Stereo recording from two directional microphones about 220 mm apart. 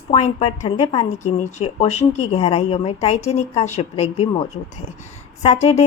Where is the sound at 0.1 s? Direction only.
30° left (ahead or behind).